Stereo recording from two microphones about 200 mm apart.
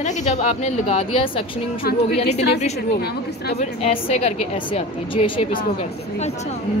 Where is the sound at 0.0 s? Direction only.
35° left (ahead or behind).